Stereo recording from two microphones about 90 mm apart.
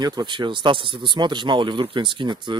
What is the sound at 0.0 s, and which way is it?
Speech, 55° right (ahead or behind).